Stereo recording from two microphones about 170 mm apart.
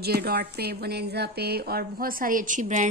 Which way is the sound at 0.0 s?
70° right (ahead or behind).